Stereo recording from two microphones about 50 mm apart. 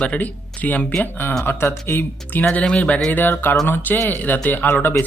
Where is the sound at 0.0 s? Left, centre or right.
Left.